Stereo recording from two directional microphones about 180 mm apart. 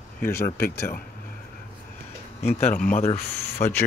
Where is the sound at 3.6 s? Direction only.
40° left (ahead or behind).